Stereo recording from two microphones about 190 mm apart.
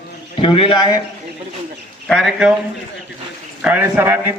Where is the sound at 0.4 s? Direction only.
30° left (ahead or behind).